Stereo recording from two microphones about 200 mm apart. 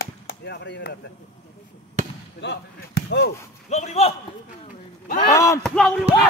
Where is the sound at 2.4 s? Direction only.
60° left (ahead or behind).